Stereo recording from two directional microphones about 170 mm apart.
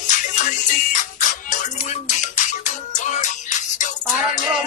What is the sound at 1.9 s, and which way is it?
Music, 45° left (ahead or behind).